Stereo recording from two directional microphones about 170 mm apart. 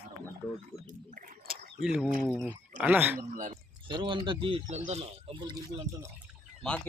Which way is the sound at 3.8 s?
30° right (ahead or behind).